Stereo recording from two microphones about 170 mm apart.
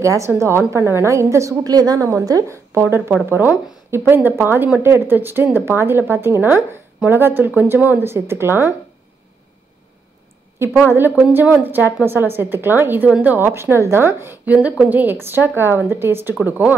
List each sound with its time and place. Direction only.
0.0 s a woman's voice: 15° right (ahead or behind)
11.1 s a woman's voice: 10° right (ahead or behind)